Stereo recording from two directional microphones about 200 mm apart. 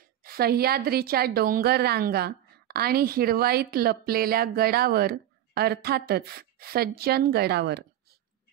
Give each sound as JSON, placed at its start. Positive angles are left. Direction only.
{"t": 0.2, "sound": "a woman's voice", "side_deg": -50}